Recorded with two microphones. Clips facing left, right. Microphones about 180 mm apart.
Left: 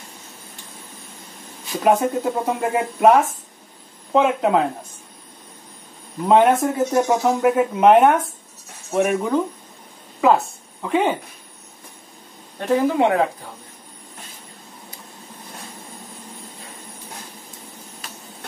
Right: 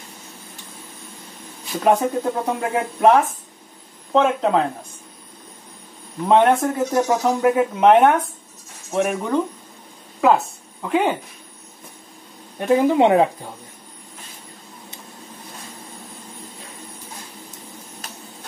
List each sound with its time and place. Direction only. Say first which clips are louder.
1.8 s speech: even; centre (ahead or behind)
6.2 s a woman's voice: even; 5° left (ahead or behind)
12.5 s speech: right 2 dB; 15° right (ahead or behind)
18.0 s printer: left 1 dB; 40° right (ahead or behind)